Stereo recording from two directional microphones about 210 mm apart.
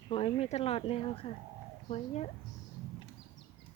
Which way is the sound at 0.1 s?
25° left (ahead or behind).